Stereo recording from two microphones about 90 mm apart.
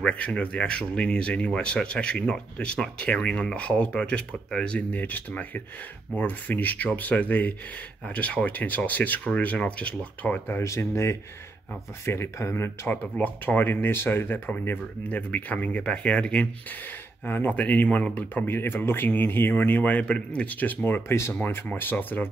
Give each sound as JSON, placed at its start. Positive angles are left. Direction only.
{"t": 0.0, "sound": "speech", "side_deg": 15}
{"t": 10.6, "sound": "speech", "side_deg": 30}